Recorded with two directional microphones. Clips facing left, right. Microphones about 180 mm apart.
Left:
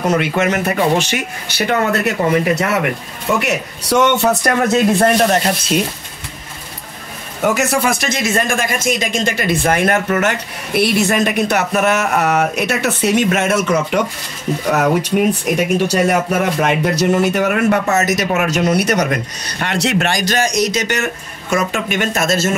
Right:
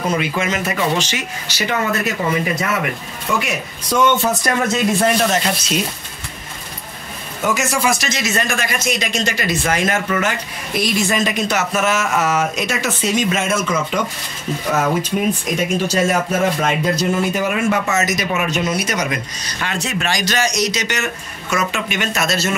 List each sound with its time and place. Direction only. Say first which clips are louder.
0.0 s speech: left 4 dB; 70° left (ahead or behind)
7.4 s speech: left 3 dB; 60° left (ahead or behind)